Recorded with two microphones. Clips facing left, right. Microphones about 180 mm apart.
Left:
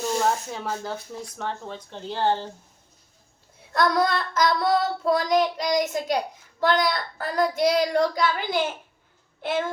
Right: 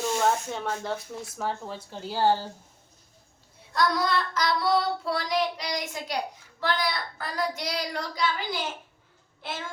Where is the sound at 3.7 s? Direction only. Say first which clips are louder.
Left 3 dB; 50° left (ahead or behind).